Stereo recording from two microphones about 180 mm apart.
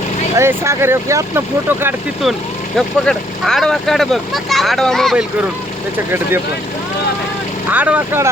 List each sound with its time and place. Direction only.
0.3 s speech: 15° right (ahead or behind)
2.7 s speech: centre (ahead or behind)
7.7 s speech: 10° right (ahead or behind)